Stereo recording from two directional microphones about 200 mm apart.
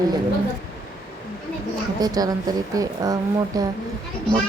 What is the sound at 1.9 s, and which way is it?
A woman's voice, 20° right (ahead or behind).